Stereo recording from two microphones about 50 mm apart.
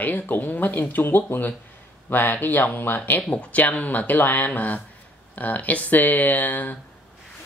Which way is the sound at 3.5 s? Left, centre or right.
Left.